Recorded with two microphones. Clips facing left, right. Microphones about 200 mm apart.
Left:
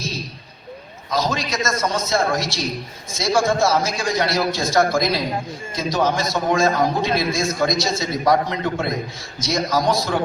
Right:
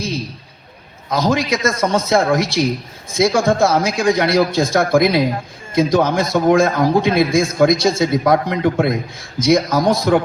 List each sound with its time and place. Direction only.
1.1 s a man's voice: 55° right (ahead or behind)